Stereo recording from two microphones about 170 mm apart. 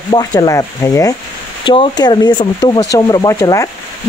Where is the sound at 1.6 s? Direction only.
30° left (ahead or behind).